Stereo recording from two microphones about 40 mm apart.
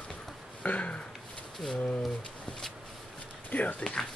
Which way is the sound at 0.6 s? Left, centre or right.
Left.